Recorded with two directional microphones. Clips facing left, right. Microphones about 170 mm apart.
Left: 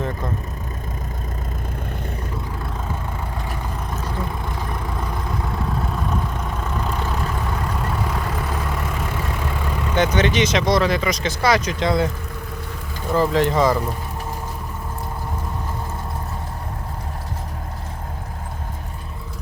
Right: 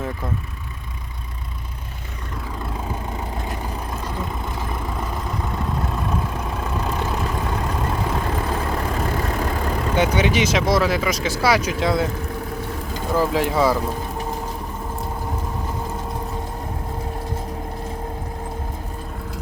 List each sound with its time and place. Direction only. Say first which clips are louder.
5.8 s vehicle: even; centre (ahead or behind)
6.7 s vehicle: right 1 dB; 15° right (ahead or behind); by 9.8 s 40° right (ahead or behind)
9.9 s speech: left 1 dB; 10° right (ahead or behind)
13.1 s speech: left 2 dB; 5° right (ahead or behind)